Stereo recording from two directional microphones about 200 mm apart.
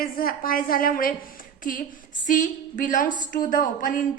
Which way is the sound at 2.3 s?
40° left (ahead or behind).